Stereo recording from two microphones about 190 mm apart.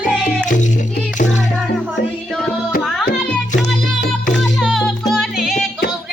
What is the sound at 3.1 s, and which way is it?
Music, 55° left (ahead or behind).